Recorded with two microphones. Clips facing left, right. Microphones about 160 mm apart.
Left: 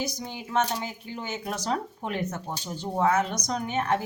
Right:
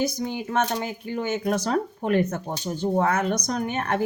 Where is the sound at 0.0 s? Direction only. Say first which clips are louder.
Right 7 dB; 55° right (ahead or behind).